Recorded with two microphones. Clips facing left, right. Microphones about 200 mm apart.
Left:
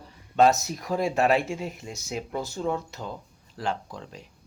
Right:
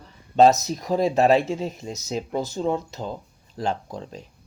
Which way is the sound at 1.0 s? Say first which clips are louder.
Right 5 dB; 35° right (ahead or behind).